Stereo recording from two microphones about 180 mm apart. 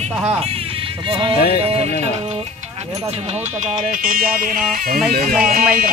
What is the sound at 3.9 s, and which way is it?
Speech, 50° right (ahead or behind).